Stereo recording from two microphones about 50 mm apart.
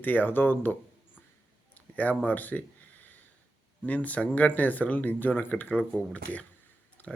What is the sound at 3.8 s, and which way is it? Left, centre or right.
Speech, left.